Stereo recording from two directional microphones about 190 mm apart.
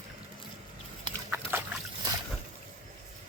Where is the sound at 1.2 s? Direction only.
10° right (ahead or behind).